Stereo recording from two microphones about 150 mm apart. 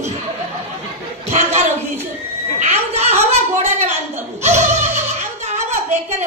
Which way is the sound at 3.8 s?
50° right (ahead or behind).